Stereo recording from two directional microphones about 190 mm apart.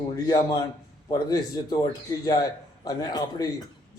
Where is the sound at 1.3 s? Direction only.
20° left (ahead or behind).